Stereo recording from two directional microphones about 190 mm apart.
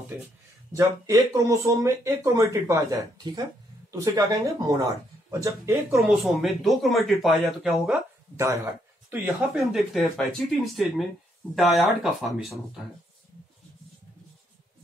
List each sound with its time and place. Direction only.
0.7 s speech: 15° right (ahead or behind)
5.9 s speech: centre (ahead or behind)